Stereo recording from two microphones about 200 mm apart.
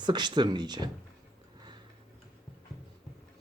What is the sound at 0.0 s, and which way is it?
Speech, 20° right (ahead or behind).